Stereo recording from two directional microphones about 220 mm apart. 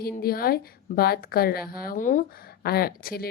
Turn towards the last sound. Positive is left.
turn(degrees=45)  # may be behind; listen again after turning